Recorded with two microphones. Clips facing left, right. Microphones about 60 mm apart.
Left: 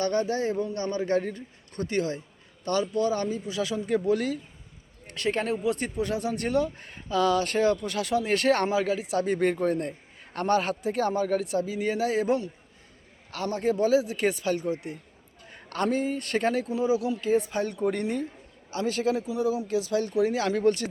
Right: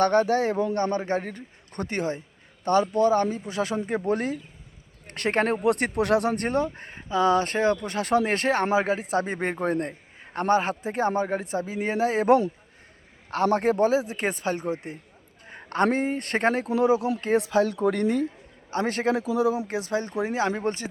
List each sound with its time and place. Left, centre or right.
0.0 s speech: right
0.7 s speech: right
5.0 s speech: right
6.3 s speech: right
8.4 s speech: right
8.7 s speech: right
9.2 s speech: right
13.3 s a man's voice: right
16.6 s speech: right
17.3 s speech: right
18.7 s speech: right
19.1 s speech: right
19.5 s speech: right